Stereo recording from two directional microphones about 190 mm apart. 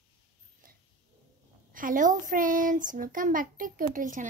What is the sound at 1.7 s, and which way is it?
A child's voice, 45° right (ahead or behind).